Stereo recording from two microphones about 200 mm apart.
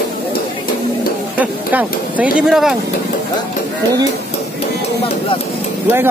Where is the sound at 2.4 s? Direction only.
5° right (ahead or behind).